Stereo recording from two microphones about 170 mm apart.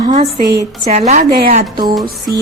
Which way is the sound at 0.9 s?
40° right (ahead or behind).